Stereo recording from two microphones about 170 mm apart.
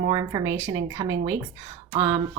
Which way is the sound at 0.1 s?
25° right (ahead or behind).